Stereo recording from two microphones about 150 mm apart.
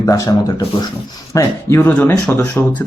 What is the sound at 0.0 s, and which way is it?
Speech, 20° left (ahead or behind).